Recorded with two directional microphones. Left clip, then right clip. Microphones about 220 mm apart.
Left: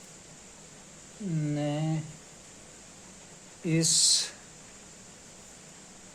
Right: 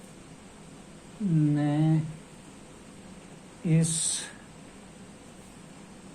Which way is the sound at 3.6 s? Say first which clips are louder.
Left 6 dB; 35° left (ahead or behind).